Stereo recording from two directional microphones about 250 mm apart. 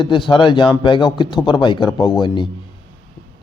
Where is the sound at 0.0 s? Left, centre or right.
Centre.